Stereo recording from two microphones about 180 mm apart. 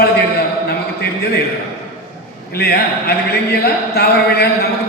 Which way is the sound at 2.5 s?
65° left (ahead or behind).